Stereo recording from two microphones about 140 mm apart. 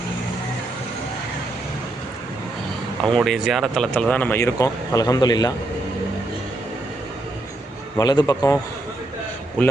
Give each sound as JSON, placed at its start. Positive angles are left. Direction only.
{"t": 3.0, "sound": "speech", "side_deg": 0}
{"t": 7.9, "sound": "a man's voice", "side_deg": 25}